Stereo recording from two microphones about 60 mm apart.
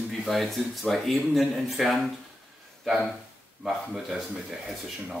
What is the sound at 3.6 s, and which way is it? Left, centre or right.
Speech, centre.